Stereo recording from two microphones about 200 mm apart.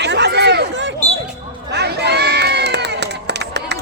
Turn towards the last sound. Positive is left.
turn(degrees=-60)  # may be behind; listen again after turning